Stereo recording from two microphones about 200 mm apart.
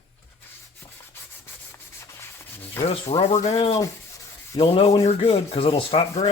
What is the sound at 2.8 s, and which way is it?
Speech, 30° left (ahead or behind).